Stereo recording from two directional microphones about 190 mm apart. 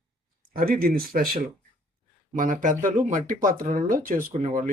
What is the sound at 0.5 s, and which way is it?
Speech, 50° right (ahead or behind).